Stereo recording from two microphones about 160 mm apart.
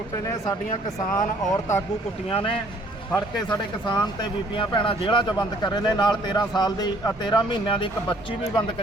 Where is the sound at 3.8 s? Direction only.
30° left (ahead or behind).